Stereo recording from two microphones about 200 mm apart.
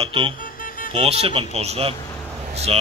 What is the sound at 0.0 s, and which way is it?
Speech, 25° right (ahead or behind).